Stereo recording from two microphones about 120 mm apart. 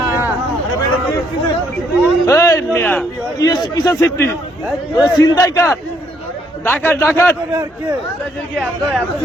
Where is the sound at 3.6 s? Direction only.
30° left (ahead or behind).